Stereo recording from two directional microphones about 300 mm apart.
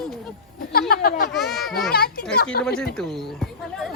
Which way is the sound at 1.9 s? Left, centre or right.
Left.